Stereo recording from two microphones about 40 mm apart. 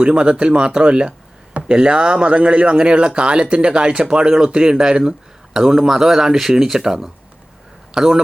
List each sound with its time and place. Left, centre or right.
0.0 s speech: right